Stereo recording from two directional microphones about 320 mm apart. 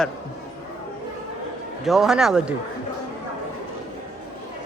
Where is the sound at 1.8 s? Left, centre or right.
Centre.